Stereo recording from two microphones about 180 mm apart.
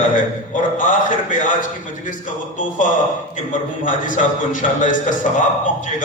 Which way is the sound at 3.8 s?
45° left (ahead or behind).